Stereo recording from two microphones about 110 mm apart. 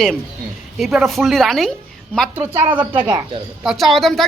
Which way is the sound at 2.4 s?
15° right (ahead or behind).